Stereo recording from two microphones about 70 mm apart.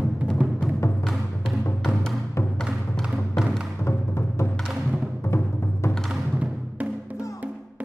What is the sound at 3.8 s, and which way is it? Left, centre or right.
Music, left.